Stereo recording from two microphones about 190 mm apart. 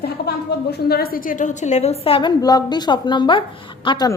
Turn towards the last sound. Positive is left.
turn(degrees=25)  # may be behind; listen again after turning